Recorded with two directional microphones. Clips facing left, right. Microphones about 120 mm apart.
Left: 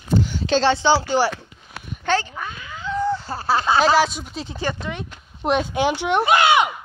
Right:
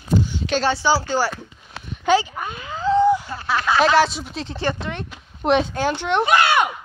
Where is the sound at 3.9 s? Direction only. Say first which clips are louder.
Right 1 dB; centre (ahead or behind).